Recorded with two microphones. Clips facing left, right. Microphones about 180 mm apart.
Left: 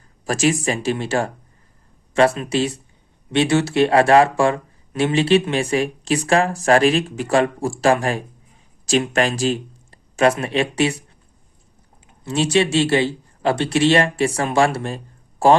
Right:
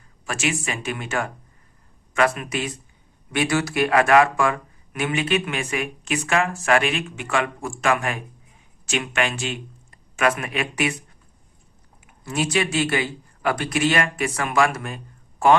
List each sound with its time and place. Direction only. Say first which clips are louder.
0.3 s speech: left 7 dB; 35° left (ahead or behind)
12.0 s speech: left 4 dB; 25° left (ahead or behind)